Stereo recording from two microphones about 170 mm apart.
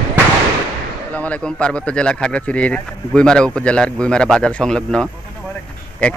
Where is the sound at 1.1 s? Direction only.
10° left (ahead or behind).